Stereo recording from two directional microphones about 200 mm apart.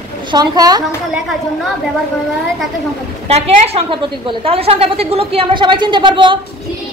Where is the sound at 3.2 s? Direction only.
30° right (ahead or behind).